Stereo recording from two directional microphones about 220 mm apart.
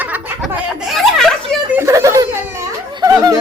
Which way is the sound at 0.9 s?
Centre (ahead or behind).